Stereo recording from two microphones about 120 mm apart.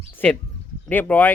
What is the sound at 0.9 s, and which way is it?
Speech, 15° left (ahead or behind).